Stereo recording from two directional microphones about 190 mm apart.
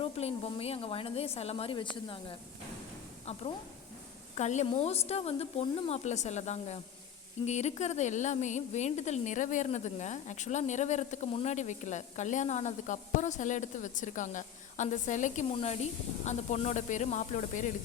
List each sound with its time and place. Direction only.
0.0 s a woman's voice: 30° left (ahead or behind)